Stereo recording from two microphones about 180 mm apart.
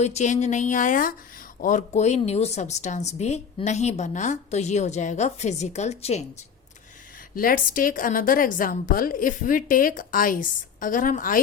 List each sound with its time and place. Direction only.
0.0 s a woman's voice: 40° left (ahead or behind)
7.3 s a woman's voice: 50° left (ahead or behind)